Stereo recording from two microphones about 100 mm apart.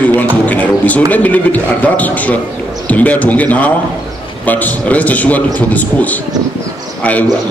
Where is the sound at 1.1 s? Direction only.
15° left (ahead or behind).